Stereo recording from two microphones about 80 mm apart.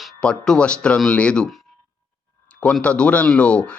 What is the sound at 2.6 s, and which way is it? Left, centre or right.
Speech, centre.